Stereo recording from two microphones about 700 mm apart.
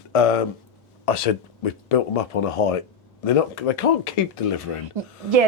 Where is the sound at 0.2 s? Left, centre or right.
Left.